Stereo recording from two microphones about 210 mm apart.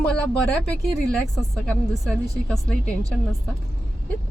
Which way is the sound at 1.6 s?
Centre (ahead or behind).